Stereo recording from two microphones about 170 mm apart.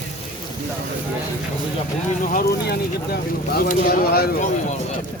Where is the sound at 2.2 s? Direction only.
55° left (ahead or behind).